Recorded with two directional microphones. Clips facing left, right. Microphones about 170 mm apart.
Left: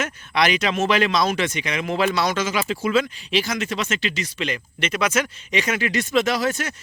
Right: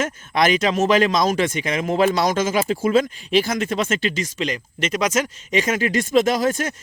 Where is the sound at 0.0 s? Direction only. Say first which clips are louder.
Right 2 dB; 45° right (ahead or behind).